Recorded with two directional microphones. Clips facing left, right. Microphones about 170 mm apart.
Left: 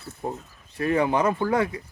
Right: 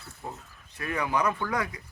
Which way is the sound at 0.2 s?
30° left (ahead or behind).